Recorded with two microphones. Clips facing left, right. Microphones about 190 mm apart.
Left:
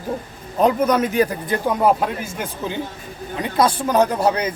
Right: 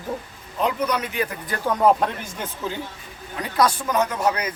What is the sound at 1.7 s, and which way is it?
Speech, 5° left (ahead or behind).